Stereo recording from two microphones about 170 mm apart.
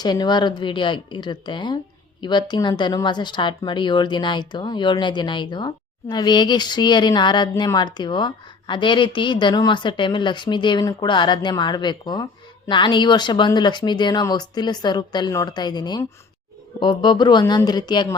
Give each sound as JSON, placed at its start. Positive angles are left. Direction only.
{"t": 0.0, "sound": "speech", "side_deg": 25}